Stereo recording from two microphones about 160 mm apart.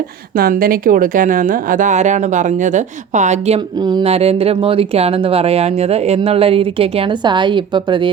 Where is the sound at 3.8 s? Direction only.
25° right (ahead or behind).